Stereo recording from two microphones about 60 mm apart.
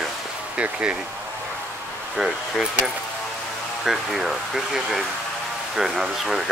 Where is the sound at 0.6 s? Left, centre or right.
Right.